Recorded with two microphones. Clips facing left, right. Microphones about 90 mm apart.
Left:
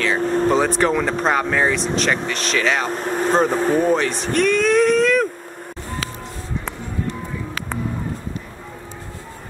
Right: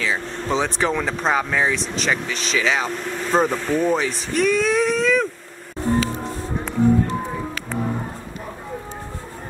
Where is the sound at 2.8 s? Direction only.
45° left (ahead or behind).